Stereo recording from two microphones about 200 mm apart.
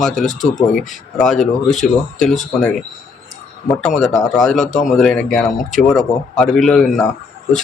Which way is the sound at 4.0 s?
5° left (ahead or behind).